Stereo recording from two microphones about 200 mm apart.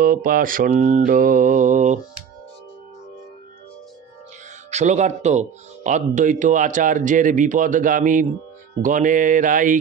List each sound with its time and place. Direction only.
0.0 s speech: 45° right (ahead or behind)
4.6 s speech: 35° right (ahead or behind)